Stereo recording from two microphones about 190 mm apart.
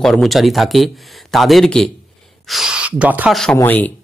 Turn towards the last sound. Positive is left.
turn(degrees=10)  # may be behind; listen again after turning